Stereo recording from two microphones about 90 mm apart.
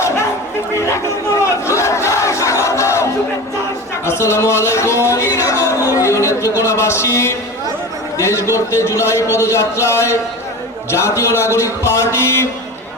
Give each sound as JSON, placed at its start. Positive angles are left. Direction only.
{"t": 1.6, "sound": "battle cry", "side_deg": 30}
{"t": 4.0, "sound": "speech", "side_deg": 30}